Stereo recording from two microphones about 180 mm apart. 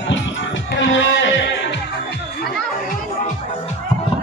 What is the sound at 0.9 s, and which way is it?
Music, 90° left.